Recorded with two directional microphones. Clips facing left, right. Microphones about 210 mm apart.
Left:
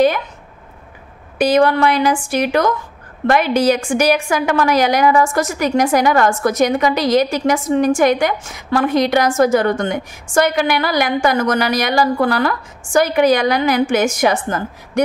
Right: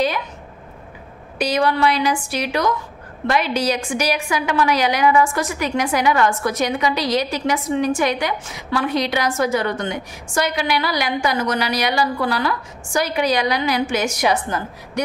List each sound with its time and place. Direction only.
1.4 s a woman's voice: 50° left (ahead or behind)